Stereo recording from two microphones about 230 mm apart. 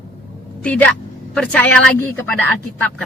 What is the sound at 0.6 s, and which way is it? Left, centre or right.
A woman's voice, centre.